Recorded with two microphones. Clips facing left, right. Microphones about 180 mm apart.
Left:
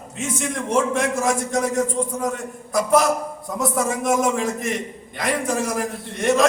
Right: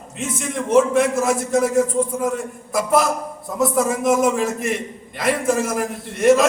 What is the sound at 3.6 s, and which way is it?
A man's voice, centre (ahead or behind).